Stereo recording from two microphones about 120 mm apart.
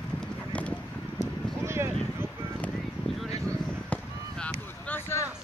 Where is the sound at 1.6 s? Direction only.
20° right (ahead or behind).